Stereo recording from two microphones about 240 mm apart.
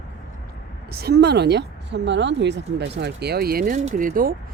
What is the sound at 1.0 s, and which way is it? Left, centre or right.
Speech, right.